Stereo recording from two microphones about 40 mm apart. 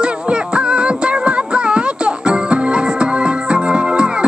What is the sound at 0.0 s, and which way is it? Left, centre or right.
Music, right.